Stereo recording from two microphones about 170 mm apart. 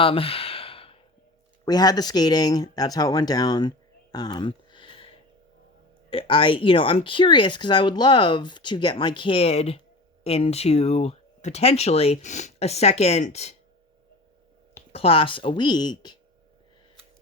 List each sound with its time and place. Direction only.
0.0 s sigh: 35° left (ahead or behind)
1.6 s speech: 25° left (ahead or behind)
4.1 s a sound: 25° left (ahead or behind)
6.1 s speech: 30° left (ahead or behind)
14.9 s speech: 35° left (ahead or behind)